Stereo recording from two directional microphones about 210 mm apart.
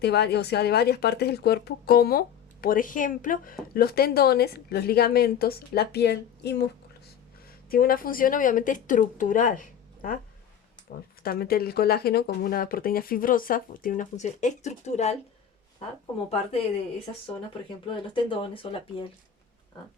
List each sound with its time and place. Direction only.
0.0 s speech: 50° left (ahead or behind)
7.7 s speech: 45° left (ahead or behind)
11.2 s speech: 45° left (ahead or behind)
18.1 s speech: 25° left (ahead or behind)